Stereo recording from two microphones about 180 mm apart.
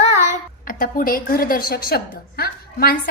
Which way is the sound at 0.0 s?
40° left (ahead or behind).